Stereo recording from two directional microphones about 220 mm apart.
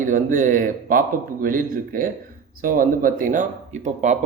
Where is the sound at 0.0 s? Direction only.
35° right (ahead or behind).